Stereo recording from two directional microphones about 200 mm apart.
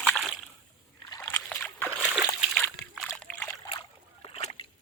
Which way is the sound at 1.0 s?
15° left (ahead or behind).